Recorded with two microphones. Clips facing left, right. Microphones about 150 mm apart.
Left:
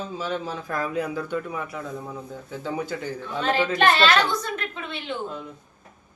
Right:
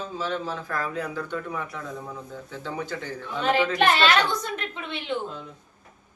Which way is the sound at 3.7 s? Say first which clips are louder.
Left 4 dB; 15° right (ahead or behind).